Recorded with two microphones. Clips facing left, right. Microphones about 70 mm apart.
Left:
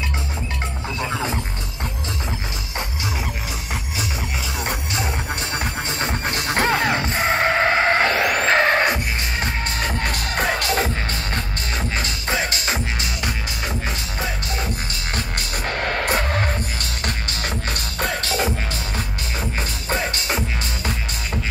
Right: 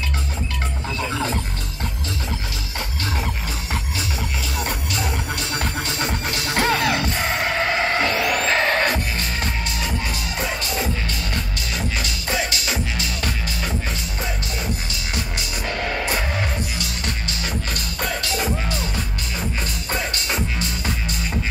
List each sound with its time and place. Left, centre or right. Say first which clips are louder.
4.6 s music: even; left
9.8 s music: left 2 dB; left
12.0 s music: left 2 dB; left
17.0 s music: left 1 dB; left